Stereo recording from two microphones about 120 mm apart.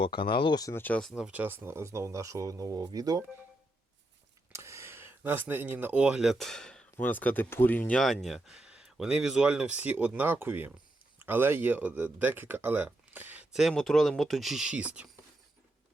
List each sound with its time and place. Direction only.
0.0 s speech: 45° left (ahead or behind)
0.7 s speech: 15° left (ahead or behind)
1.1 s speech: 10° right (ahead or behind); by 3.2 s 30° right (ahead or behind)
4.5 s speech: 25° right (ahead or behind)
13.5 s speech: centre (ahead or behind)